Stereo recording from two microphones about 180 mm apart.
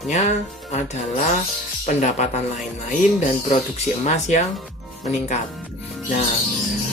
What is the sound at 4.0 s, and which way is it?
Speech, 40° left (ahead or behind).